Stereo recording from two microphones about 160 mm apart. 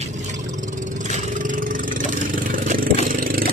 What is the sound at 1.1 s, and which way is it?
Vehicle, 50° right (ahead or behind).